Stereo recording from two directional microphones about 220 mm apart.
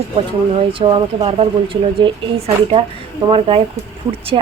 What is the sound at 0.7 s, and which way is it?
A woman's voice, 25° right (ahead or behind).